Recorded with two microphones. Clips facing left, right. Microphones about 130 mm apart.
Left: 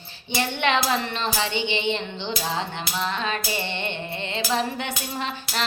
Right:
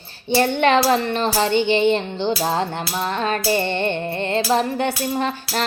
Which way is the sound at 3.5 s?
45° right (ahead or behind).